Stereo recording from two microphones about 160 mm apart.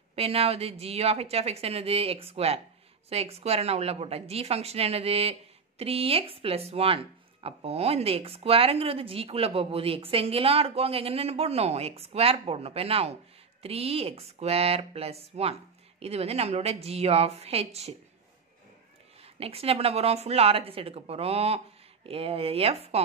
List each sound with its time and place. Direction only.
0.1 s speech: 40° right (ahead or behind)
19.2 s speech: 40° right (ahead or behind)